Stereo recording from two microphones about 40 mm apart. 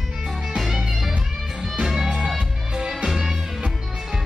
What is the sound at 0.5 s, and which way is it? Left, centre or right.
Music, centre.